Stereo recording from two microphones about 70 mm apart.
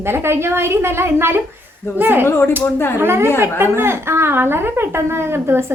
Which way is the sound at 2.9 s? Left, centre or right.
Right.